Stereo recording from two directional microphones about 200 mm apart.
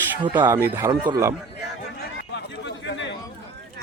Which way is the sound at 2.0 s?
60° left (ahead or behind).